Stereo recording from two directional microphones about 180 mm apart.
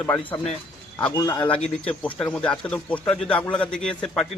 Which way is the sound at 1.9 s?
10° left (ahead or behind).